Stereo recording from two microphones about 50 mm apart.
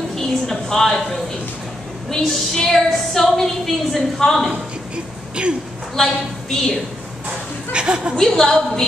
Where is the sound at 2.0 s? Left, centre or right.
Centre.